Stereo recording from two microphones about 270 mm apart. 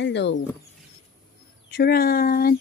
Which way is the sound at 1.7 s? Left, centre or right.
Left.